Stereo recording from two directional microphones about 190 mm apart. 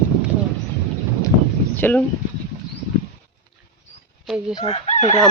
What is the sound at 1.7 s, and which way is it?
Speech, 10° left (ahead or behind).